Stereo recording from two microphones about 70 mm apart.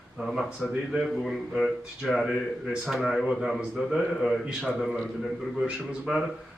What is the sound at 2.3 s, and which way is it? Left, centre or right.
A man's voice, centre.